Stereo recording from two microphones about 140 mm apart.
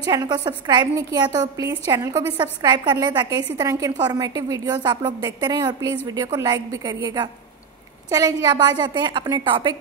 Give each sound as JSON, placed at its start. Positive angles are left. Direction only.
{"t": 0.0, "sound": "a woman's voice", "side_deg": -30}